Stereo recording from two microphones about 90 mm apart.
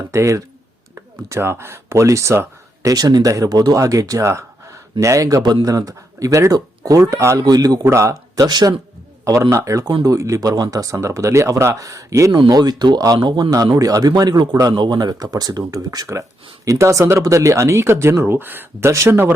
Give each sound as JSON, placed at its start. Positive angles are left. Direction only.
{"t": 0.1, "sound": "speech", "side_deg": -35}
{"t": 7.4, "sound": "speech", "side_deg": -45}
{"t": 7.9, "sound": "speech", "side_deg": -30}
{"t": 8.4, "sound": "speech", "side_deg": -45}
{"t": 12.5, "sound": "speech", "side_deg": -50}
{"t": 13.7, "sound": "speech", "side_deg": -40}